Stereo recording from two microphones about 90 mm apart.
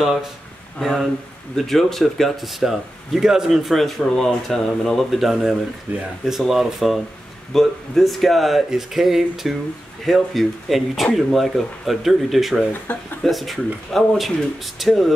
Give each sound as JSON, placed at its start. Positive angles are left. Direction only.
{"t": 0.0, "sound": "speech", "side_deg": 0}
{"t": 5.9, "sound": "speech", "side_deg": -15}
{"t": 6.2, "sound": "speech", "side_deg": -5}
{"t": 12.9, "sound": "speech", "side_deg": 15}
{"t": 13.2, "sound": "speech", "side_deg": 0}